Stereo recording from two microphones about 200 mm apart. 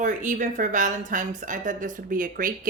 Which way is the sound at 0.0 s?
40° right (ahead or behind).